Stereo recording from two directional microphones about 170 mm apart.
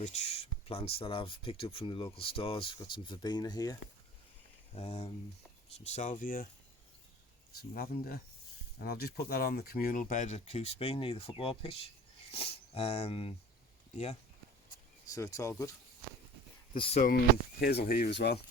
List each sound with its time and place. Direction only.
0.0 s speech: 40° left (ahead or behind); by 3.8 s 25° left (ahead or behind)
4.7 s speech: 40° left (ahead or behind); by 6.5 s 55° left (ahead or behind)
7.6 s speech: 65° left (ahead or behind); by 13.3 s 35° left (ahead or behind)
15.1 s speech: 20° left (ahead or behind)
16.7 s speech: 30° left (ahead or behind)
17.6 s speech: 65° left (ahead or behind)